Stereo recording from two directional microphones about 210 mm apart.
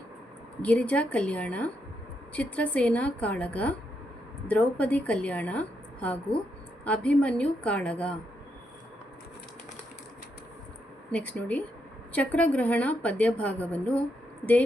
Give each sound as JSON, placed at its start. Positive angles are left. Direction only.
{"t": 0.6, "sound": "a woman's voice", "side_deg": 5}
{"t": 11.1, "sound": "a woman's voice", "side_deg": 5}